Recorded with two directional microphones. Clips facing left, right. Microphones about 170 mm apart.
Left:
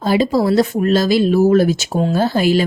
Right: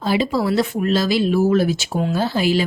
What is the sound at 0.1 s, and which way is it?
Speech, 40° left (ahead or behind).